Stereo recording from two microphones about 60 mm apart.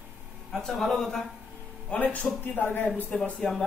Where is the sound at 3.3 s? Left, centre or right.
Centre.